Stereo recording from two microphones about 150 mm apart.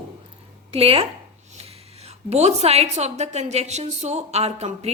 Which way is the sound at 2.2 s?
45° right (ahead or behind).